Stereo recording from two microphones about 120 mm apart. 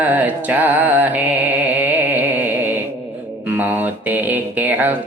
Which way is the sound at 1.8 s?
15° right (ahead or behind).